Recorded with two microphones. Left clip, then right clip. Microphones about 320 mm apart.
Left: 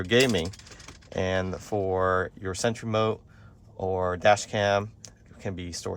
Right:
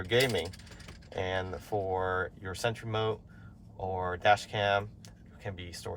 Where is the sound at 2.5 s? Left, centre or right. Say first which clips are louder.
Left 5 dB; left.